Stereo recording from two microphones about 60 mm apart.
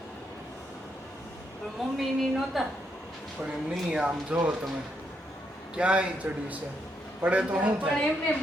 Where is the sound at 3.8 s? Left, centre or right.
Centre.